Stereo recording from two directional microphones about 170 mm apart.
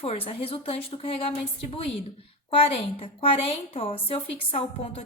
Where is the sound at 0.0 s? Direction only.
35° left (ahead or behind).